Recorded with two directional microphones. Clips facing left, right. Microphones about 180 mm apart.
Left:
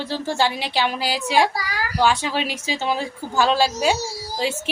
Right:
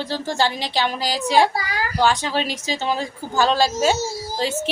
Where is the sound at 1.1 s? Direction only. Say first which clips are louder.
Right 3 dB; 40° right (ahead or behind).